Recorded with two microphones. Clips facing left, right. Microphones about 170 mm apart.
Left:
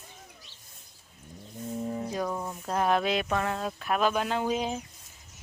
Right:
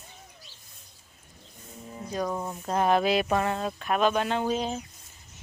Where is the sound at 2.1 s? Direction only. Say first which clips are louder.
Right 5 dB; 5° left (ahead or behind).